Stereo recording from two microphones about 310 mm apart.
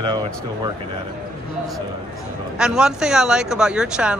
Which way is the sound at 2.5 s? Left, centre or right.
Centre.